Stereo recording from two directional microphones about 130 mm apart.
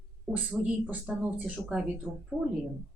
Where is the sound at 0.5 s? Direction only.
5° right (ahead or behind).